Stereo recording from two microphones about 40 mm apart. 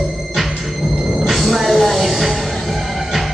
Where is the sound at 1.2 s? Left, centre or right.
Centre.